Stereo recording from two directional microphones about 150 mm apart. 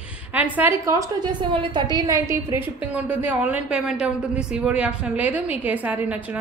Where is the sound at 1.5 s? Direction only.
35° right (ahead or behind).